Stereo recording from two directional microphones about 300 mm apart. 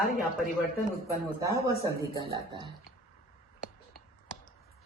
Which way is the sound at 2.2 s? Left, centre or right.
Centre.